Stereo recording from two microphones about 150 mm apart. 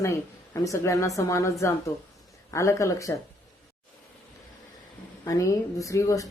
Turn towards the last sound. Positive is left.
turn(degrees=20)  # may be behind; listen again after turning